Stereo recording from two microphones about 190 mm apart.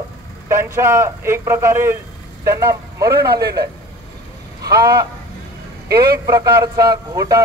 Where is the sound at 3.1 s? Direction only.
55° right (ahead or behind).